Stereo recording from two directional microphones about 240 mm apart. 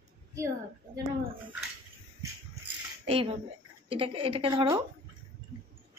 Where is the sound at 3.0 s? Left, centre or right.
Right.